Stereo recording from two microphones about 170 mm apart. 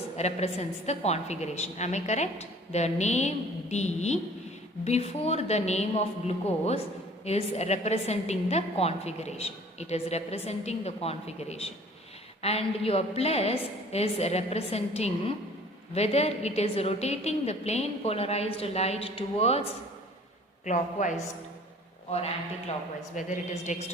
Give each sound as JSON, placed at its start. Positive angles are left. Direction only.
{"t": 0.2, "sound": "a woman's voice", "side_deg": 40}
{"t": 20.7, "sound": "a woman's voice", "side_deg": 45}
{"t": 23.1, "sound": "a woman's voice", "side_deg": 45}